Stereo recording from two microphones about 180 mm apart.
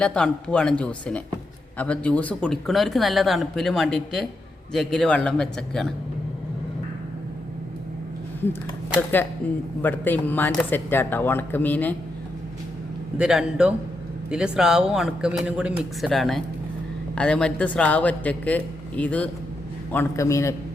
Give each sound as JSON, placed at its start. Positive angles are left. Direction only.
{"t": 0.0, "sound": "speech", "side_deg": 5}
{"t": 9.4, "sound": "speech", "side_deg": 10}
{"t": 13.1, "sound": "speech", "side_deg": -5}